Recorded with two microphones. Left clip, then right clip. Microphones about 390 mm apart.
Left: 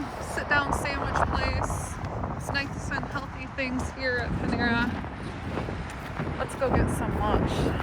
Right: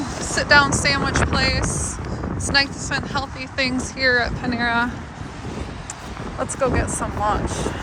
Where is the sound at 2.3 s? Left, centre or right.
Right.